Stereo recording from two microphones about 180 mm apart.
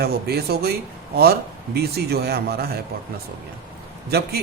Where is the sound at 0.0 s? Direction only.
60° right (ahead or behind).